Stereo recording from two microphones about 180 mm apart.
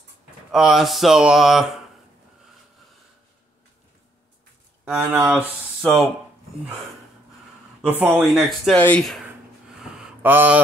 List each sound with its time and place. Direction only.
0.5 s speech: 5° right (ahead or behind)
4.8 s a man's voice: 5° right (ahead or behind)
7.8 s a man's voice: 10° right (ahead or behind)
8.7 s speech: 10° left (ahead or behind)
9.8 s a sound: 5° right (ahead or behind)